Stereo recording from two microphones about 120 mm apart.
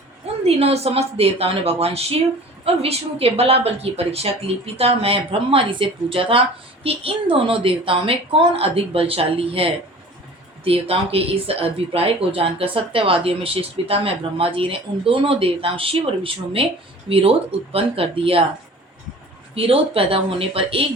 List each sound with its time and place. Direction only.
0.4 s a woman's voice: 60° right (ahead or behind)
19.5 s speech: 50° right (ahead or behind)